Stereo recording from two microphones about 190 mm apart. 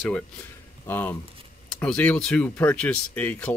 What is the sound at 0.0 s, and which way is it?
Speech, 5° left (ahead or behind).